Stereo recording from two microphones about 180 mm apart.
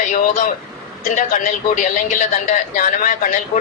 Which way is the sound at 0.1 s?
45° left (ahead or behind).